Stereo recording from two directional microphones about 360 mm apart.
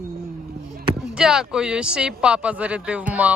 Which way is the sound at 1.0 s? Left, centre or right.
Centre.